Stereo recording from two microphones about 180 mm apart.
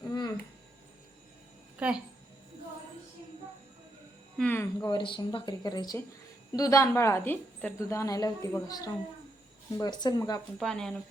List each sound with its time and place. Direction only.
0.1 s a sound: 20° left (ahead or behind)
1.8 s speech: 5° right (ahead or behind)
4.4 s speech: 5° left (ahead or behind)
4.8 s a woman's voice: 25° left (ahead or behind)
10.6 s speech: 5° left (ahead or behind)